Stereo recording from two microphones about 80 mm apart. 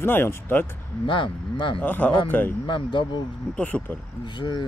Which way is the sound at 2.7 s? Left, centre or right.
Left.